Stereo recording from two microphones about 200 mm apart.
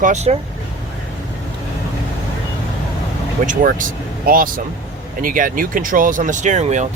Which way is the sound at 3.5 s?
40° right (ahead or behind).